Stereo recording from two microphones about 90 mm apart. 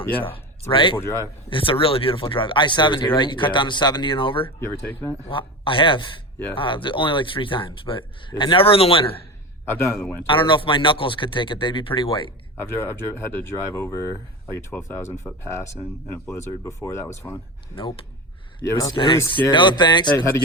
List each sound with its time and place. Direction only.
0.7 s speech: 70° left (ahead or behind)
0.9 s speech: 30° left (ahead or behind)
1.5 s speech: 75° left (ahead or behind)
4.4 s speech: 25° left (ahead or behind)
5.3 s speech: 70° left (ahead or behind); by 9.1 s 90° left
9.7 s speech: 25° left (ahead or behind)
10.2 s speech: 70° left (ahead or behind)
12.6 s speech: 25° left (ahead or behind)
18.6 s speech: 30° left (ahead or behind)
19.0 s speech: 40° left (ahead or behind)
19.5 s speech: 60° left (ahead or behind)